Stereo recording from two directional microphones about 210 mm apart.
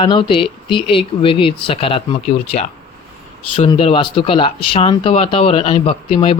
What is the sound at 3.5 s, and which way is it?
Speech, 25° left (ahead or behind).